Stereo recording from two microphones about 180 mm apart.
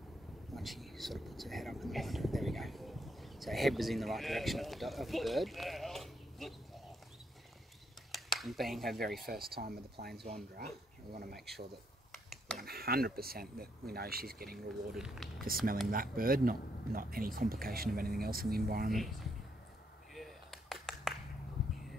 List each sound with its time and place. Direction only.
0.6 s speech: centre (ahead or behind)
8.1 s speech: centre (ahead or behind)
9.3 s speech: 55° right (ahead or behind)
11.3 s speech: centre (ahead or behind)
12.5 s speech: 60° right (ahead or behind)
14.7 s speech: centre (ahead or behind)
15.4 s speech: 55° right (ahead or behind)
20.2 s a sound: centre (ahead or behind)